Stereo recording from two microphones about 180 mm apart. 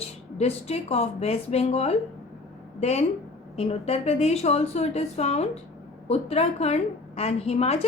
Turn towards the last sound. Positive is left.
turn(degrees=35)  # may be behind; listen again after turning